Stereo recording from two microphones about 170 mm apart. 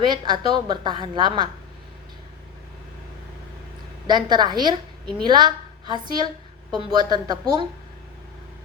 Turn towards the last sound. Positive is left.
turn(degrees=-25)  # may be behind; listen again after turning